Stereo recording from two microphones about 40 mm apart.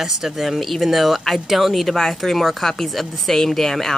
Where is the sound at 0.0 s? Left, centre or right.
Centre.